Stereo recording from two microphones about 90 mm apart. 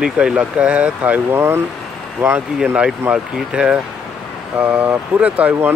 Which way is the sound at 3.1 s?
10° right (ahead or behind).